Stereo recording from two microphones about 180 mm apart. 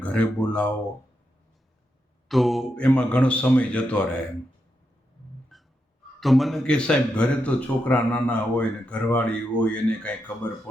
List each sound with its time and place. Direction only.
0.0 s speech: 5° left (ahead or behind)
2.2 s speech: centre (ahead or behind)
5.5 s music: centre (ahead or behind)
6.1 s speech: centre (ahead or behind)